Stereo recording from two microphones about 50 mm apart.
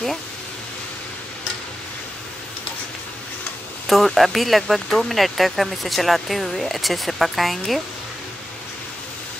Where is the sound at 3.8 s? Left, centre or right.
Centre.